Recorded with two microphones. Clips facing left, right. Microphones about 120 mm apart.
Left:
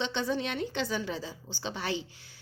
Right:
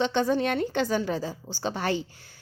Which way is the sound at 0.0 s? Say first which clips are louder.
Right 7 dB; 50° right (ahead or behind).